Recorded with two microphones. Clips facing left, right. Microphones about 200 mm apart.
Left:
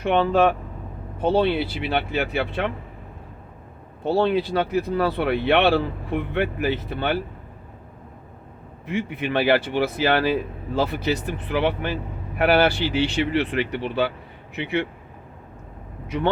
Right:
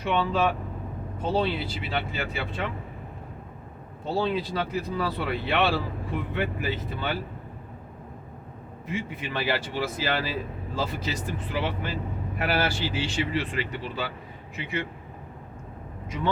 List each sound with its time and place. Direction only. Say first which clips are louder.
0.0 s speech: left 6 dB; 55° left (ahead or behind)
4.0 s speech: left 6 dB; 65° left (ahead or behind)
8.9 s speech: left 7 dB; 65° left (ahead or behind)
16.0 s speech: left 6 dB; 65° left (ahead or behind)